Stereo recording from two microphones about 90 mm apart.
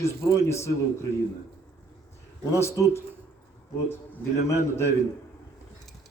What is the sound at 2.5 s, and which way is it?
Speech, 35° left (ahead or behind).